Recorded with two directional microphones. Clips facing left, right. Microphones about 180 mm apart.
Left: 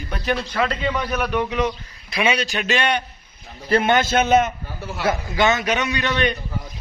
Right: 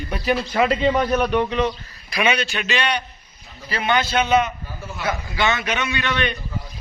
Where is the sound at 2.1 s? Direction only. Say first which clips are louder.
Even; 30° left (ahead or behind).